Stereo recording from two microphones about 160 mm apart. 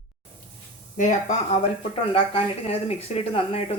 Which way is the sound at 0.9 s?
50° left (ahead or behind).